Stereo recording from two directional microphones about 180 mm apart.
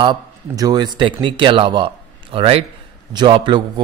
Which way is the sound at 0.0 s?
25° right (ahead or behind).